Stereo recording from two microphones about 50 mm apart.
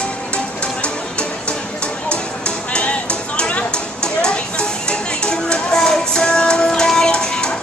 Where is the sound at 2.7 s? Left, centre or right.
Left.